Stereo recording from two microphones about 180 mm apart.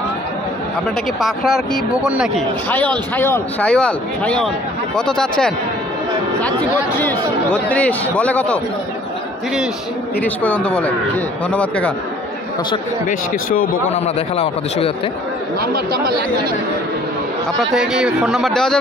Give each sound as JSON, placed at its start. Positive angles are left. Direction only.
{"t": 1.2, "sound": "a man's voice", "side_deg": 0}
{"t": 2.7, "sound": "a man's voice", "side_deg": 10}
{"t": 7.7, "sound": "a man's voice", "side_deg": 5}
{"t": 10.2, "sound": "a man's voice", "side_deg": 10}
{"t": 13.9, "sound": "a man's voice", "side_deg": 35}
{"t": 15.7, "sound": "speech", "side_deg": -55}
{"t": 17.6, "sound": "a man's voice", "side_deg": 0}